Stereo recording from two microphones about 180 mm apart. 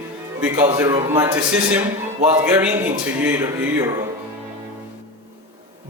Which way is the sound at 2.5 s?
10° right (ahead or behind).